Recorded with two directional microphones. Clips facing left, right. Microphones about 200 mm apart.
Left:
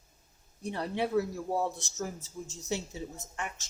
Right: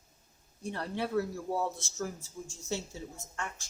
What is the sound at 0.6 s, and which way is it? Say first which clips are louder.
Speech: left 3 dB; 15° left (ahead or behind).